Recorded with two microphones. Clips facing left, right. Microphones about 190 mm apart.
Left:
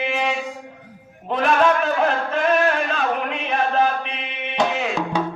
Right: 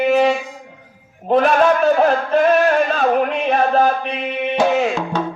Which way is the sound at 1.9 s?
40° right (ahead or behind).